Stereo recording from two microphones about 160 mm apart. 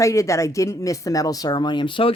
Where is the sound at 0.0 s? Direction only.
20° left (ahead or behind).